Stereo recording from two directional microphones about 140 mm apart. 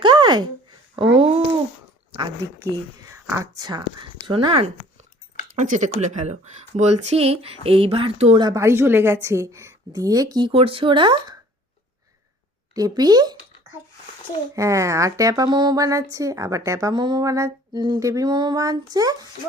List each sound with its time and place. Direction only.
0.0 s a sound: 35° right (ahead or behind)
0.9 s speech: 40° right (ahead or behind)
2.4 s speech: 20° right (ahead or behind); by 4.7 s 40° right (ahead or behind)
5.5 s speech: 60° right (ahead or behind); by 8.4 s 45° right (ahead or behind)
8.4 s speech: 25° right (ahead or behind)
12.7 s speech: 30° right (ahead or behind)
14.5 s speech: 20° right (ahead or behind)